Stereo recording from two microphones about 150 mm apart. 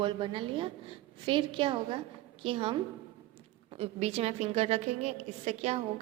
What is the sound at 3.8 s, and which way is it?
A woman's voice, 45° right (ahead or behind).